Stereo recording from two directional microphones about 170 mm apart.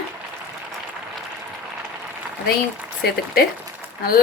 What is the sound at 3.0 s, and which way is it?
Speech, 65° left (ahead or behind).